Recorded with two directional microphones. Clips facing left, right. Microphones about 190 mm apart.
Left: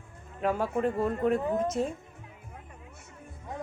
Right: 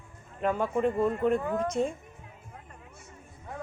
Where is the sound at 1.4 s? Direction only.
20° left (ahead or behind).